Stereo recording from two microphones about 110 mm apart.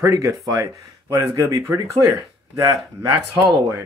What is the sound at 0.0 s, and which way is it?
Speech, 30° right (ahead or behind).